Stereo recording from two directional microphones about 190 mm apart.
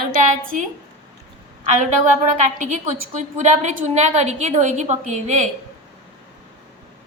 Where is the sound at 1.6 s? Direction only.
40° right (ahead or behind).